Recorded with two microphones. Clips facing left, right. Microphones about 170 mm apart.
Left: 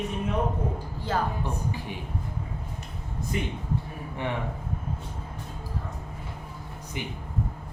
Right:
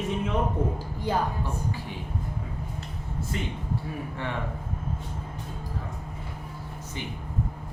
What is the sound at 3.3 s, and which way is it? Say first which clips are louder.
Speech: left 3 dB; 15° left (ahead or behind).